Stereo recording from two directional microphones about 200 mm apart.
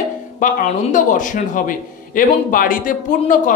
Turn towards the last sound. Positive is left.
turn(degrees=40)  # may be behind; listen again after turning